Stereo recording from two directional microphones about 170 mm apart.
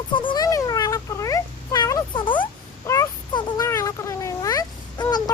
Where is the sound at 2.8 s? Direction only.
15° left (ahead or behind).